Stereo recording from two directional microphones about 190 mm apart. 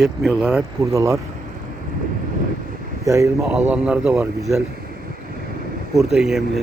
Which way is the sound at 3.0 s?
15° right (ahead or behind).